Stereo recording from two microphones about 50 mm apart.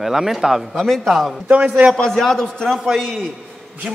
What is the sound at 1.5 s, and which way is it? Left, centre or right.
Speech, right.